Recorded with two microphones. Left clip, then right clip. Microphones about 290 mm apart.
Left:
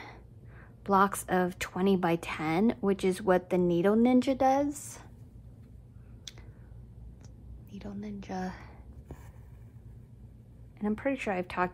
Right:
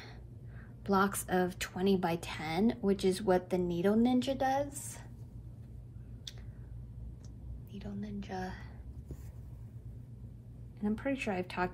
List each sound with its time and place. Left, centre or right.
0.8 s a woman's voice: centre
7.7 s a sound: left
10.8 s a woman's voice: left